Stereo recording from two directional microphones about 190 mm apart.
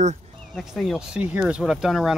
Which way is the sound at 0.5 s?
Centre (ahead or behind).